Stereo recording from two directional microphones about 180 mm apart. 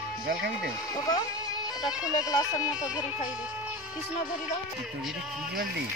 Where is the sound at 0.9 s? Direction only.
20° left (ahead or behind).